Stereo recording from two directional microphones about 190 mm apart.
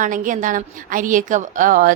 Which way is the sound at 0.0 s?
45° right (ahead or behind).